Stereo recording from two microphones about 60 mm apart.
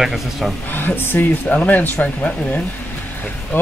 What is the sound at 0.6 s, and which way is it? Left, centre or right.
Speech, left.